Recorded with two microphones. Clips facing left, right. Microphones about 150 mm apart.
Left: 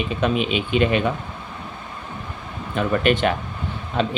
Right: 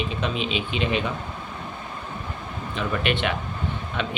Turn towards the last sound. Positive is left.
turn(degrees=35)  # may be behind; listen again after turning